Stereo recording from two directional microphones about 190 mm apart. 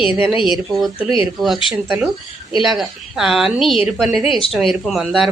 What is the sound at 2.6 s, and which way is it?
A woman's voice, centre (ahead or behind).